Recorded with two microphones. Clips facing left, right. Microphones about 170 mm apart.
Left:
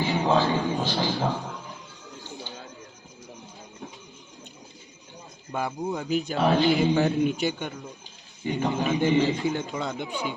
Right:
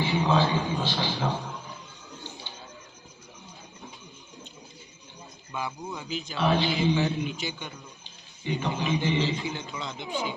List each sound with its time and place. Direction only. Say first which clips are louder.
0.0 s a man's voice: left 1 dB; 45° left (ahead or behind)
5.5 s a man's voice: left 6 dB; 50° left (ahead or behind)